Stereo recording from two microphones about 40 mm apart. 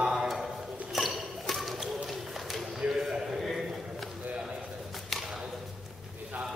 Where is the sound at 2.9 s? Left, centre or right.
Centre.